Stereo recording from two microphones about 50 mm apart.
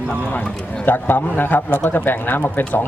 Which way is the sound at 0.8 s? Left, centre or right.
Left.